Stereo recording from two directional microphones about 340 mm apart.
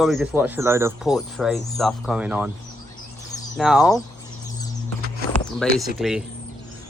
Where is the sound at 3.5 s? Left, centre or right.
Centre.